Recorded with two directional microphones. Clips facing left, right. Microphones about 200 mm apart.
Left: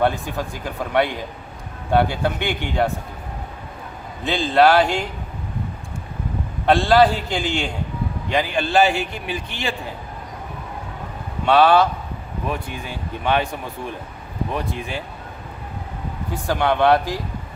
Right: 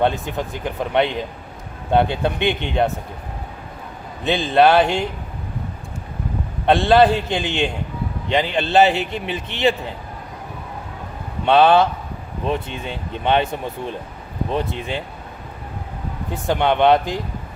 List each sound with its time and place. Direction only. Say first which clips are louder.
0.0 s a man's voice: right 1 dB; 20° right (ahead or behind)
4.2 s a man's voice: right 1 dB; 20° right (ahead or behind)
6.7 s a man's voice: right 1 dB; 20° right (ahead or behind)
11.4 s a man's voice: right 1 dB; 20° right (ahead or behind)
16.5 s a man's voice: right 2 dB; 20° right (ahead or behind)